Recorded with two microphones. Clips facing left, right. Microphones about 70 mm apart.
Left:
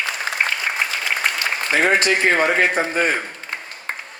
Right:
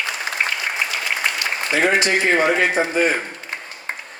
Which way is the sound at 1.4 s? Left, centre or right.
Left.